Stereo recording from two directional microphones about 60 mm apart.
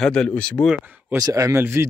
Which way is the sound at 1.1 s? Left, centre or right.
Right.